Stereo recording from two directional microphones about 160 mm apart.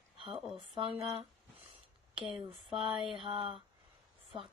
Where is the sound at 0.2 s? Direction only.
30° right (ahead or behind).